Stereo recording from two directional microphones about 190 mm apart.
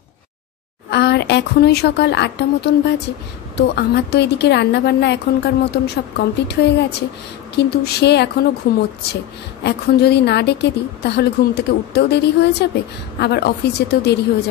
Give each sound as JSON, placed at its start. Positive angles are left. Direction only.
{"t": 0.8, "sound": "a woman's voice", "side_deg": 60}
{"t": 8.7, "sound": "a woman's voice", "side_deg": 50}
{"t": 9.6, "sound": "a woman's voice", "side_deg": 60}